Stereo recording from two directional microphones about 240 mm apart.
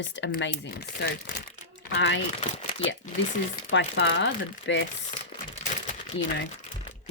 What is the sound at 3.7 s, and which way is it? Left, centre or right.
Speech, left.